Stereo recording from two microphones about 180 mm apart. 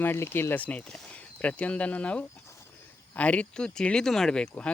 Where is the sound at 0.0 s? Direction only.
10° left (ahead or behind).